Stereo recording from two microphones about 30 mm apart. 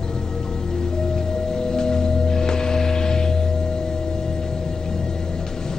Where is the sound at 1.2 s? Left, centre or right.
Centre.